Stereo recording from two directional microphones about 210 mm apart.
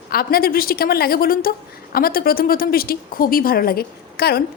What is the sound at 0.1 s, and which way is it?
A woman's voice, 45° left (ahead or behind).